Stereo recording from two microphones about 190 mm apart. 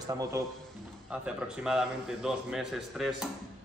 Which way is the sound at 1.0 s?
5° right (ahead or behind).